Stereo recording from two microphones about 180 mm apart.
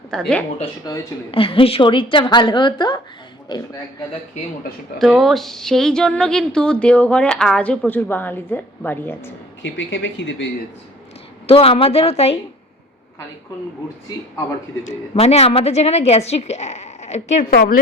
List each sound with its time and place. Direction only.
0.1 s a woman's voice: 5° left (ahead or behind)
0.9 s a woman's voice: 30° left (ahead or behind)
4.9 s a woman's voice: centre (ahead or behind)
9.7 s speech: 90° left
11.4 s a woman's voice: 30° left (ahead or behind)
14.8 s a woman's voice: 35° left (ahead or behind)